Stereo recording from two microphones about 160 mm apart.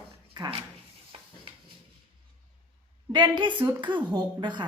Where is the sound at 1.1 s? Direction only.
35° right (ahead or behind).